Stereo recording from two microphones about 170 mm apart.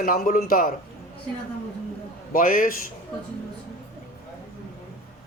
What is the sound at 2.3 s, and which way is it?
Speech, 55° left (ahead or behind).